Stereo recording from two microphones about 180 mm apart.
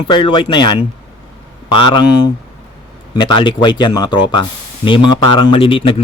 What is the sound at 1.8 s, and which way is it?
Speech, 25° left (ahead or behind).